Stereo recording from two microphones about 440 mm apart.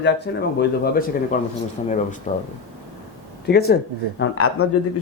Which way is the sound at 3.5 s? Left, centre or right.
Left.